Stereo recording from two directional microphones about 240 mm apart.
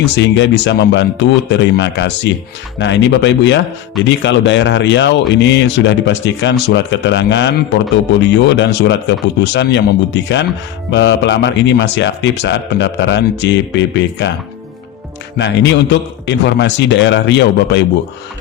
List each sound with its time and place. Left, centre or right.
0.0 s speech: left
15.4 s speech: left